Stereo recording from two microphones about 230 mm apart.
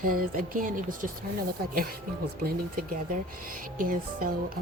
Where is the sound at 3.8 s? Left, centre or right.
Right.